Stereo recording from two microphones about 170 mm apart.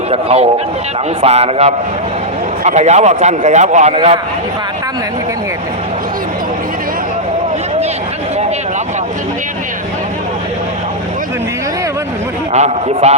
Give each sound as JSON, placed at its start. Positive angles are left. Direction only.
{"t": 0.1, "sound": "a man's voice", "side_deg": -35}
{"t": 12.5, "sound": "a man's voice", "side_deg": -40}